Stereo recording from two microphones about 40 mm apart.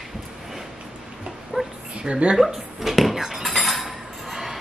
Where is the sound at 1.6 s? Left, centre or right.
Centre.